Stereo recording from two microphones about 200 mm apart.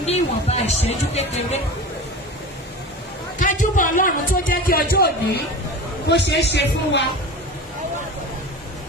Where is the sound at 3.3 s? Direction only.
40° left (ahead or behind).